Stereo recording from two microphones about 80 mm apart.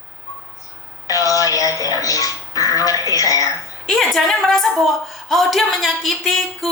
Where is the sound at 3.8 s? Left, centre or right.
Centre.